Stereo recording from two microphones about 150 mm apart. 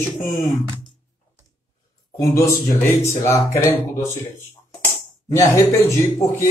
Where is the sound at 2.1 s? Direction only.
20° left (ahead or behind).